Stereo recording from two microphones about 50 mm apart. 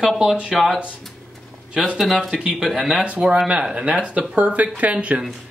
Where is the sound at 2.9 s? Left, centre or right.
Right.